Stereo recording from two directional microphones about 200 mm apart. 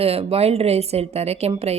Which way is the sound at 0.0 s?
30° right (ahead or behind).